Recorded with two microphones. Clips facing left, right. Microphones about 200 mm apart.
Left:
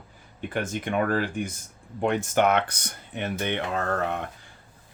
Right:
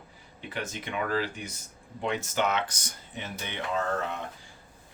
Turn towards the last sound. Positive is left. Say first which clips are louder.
# left 3 dB
turn(degrees=60)  # may be behind; listen again after turning